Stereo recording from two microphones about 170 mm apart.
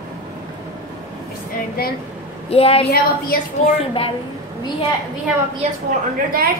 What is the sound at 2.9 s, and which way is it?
Speech, 60° left (ahead or behind).